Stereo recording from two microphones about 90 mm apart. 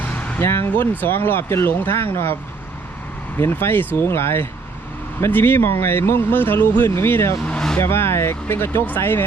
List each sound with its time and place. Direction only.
0.0 s speech: 20° left (ahead or behind)
3.3 s speech: 25° left (ahead or behind)
7.4 s vehicle: 10° left (ahead or behind)
7.8 s speech: 25° left (ahead or behind)